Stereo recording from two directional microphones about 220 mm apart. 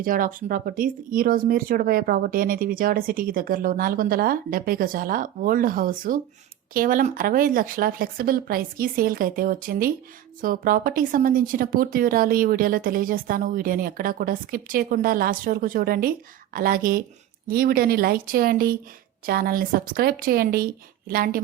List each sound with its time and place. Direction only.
0.0 s speech: 40° right (ahead or behind)